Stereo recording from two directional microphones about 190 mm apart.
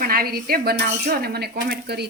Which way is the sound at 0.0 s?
50° right (ahead or behind).